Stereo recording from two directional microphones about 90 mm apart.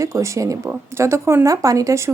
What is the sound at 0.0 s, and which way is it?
Speech, 35° right (ahead or behind).